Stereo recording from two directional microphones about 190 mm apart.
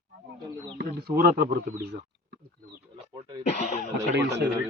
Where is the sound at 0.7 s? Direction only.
50° right (ahead or behind).